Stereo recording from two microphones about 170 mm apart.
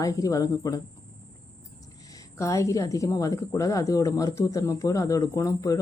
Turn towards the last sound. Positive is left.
turn(degrees=20)  # may be behind; listen again after turning